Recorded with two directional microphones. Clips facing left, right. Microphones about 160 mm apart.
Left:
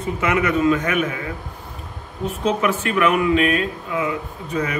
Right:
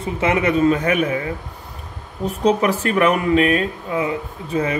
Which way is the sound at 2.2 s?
40° right (ahead or behind).